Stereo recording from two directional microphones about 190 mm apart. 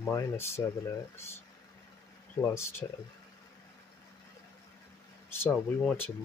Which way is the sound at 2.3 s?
15° left (ahead or behind).